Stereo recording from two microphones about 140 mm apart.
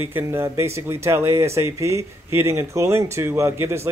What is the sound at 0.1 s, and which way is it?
Speech, 20° right (ahead or behind).